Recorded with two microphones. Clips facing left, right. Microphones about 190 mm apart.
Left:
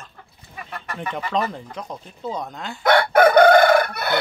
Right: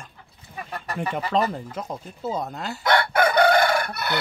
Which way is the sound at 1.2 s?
35° right (ahead or behind).